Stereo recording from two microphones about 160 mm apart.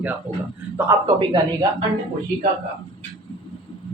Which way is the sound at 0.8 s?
20° right (ahead or behind).